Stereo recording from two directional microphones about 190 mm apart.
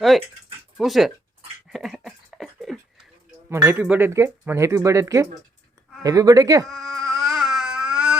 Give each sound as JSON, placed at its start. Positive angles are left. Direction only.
{"t": 0.8, "sound": "speech", "side_deg": 0}
{"t": 1.7, "sound": "a sound", "side_deg": 0}
{"t": 3.5, "sound": "speech", "side_deg": -10}
{"t": 6.7, "sound": "mosquito", "side_deg": 0}